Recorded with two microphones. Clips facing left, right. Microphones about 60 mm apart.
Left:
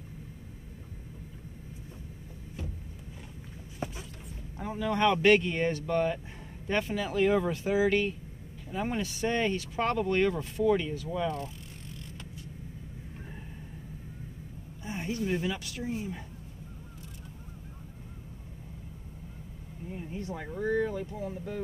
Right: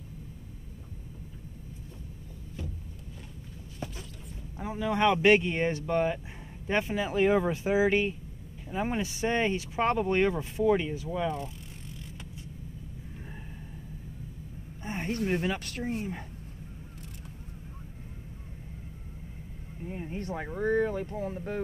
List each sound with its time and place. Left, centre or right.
3.8 s a sound: left
4.6 s speech: centre
14.8 s speech: right
19.9 s speech: right